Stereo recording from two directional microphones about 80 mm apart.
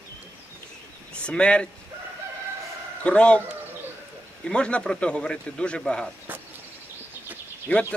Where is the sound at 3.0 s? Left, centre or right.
Centre.